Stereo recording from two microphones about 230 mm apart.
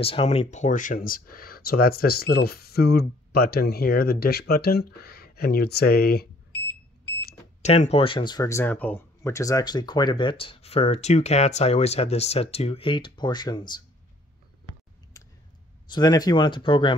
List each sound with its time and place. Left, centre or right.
0.0 s speech: left
7.6 s speech: left
15.2 s a sound: centre
15.9 s speech: centre